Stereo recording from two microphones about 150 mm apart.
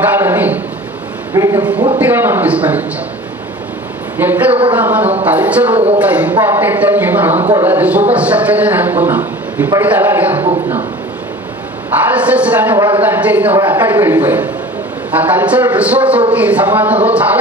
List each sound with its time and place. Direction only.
0.0 s a sound: 15° right (ahead or behind)
4.2 s a man's voice: 10° right (ahead or behind)
12.2 s a man's voice: 10° right (ahead or behind)
12.7 s speech: 30° right (ahead or behind)
13.0 s a man's voice: 10° right (ahead or behind)